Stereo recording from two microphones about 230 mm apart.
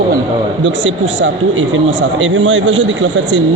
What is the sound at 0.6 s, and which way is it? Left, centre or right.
Speech, right.